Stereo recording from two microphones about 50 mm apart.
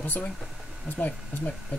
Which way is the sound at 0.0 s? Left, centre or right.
Left.